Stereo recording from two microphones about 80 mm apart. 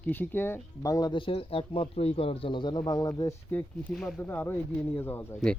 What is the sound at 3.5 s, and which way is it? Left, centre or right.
Speech, left.